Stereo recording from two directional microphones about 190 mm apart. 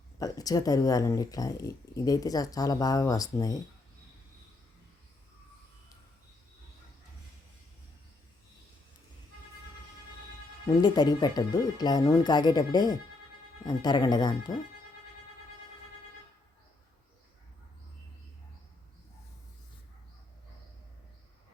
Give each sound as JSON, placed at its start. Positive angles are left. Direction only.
{"t": 0.2, "sound": "speech", "side_deg": 20}
{"t": 10.8, "sound": "speech", "side_deg": 20}